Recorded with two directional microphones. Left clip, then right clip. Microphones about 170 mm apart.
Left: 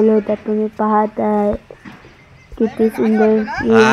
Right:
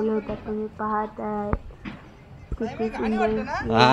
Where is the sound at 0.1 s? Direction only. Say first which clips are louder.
Left 12 dB; 35° left (ahead or behind).